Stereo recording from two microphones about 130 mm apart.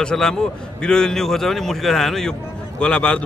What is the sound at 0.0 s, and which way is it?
A man's voice, 5° left (ahead or behind).